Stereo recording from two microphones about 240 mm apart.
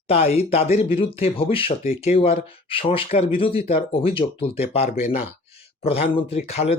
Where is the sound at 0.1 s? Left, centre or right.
Left.